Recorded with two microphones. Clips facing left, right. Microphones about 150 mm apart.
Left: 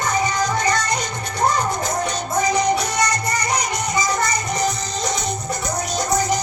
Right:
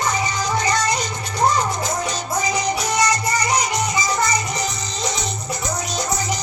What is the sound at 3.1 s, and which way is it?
Music, 55° left (ahead or behind).